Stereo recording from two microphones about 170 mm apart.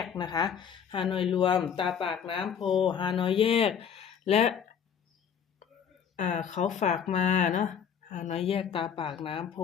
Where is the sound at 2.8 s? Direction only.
30° left (ahead or behind).